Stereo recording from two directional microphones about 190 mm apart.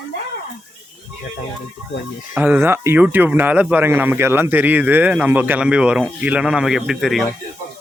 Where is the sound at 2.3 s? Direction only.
10° right (ahead or behind).